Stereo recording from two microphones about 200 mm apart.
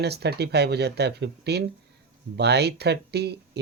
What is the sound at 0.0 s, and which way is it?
Speech, 55° right (ahead or behind).